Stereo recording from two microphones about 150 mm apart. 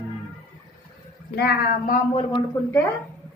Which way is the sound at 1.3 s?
90° left.